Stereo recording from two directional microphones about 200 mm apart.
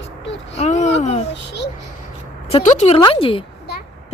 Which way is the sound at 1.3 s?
60° left (ahead or behind).